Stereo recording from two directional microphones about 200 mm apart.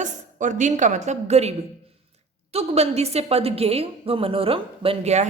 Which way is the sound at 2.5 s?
30° right (ahead or behind).